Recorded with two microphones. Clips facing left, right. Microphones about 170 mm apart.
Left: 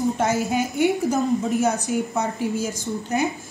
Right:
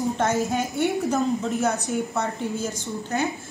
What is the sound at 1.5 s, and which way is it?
A woman's voice, 15° left (ahead or behind).